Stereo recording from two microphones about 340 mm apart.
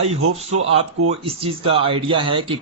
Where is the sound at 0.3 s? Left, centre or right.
Centre.